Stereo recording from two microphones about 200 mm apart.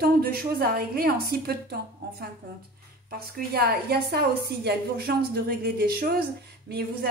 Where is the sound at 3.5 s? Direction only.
50° right (ahead or behind).